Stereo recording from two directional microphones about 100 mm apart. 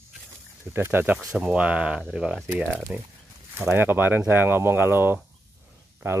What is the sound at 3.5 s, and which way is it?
Speech, 25° right (ahead or behind).